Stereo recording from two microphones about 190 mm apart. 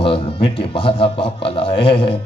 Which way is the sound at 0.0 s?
30° left (ahead or behind).